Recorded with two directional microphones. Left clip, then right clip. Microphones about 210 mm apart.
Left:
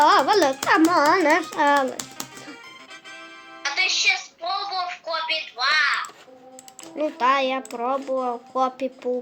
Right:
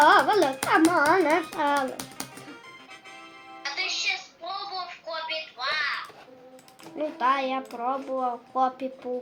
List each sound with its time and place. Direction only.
0.0 s music: 55° left (ahead or behind)
0.7 s a child's voice: 55° left (ahead or behind)
3.6 s music: 40° left (ahead or behind)
6.9 s speech: 55° left (ahead or behind)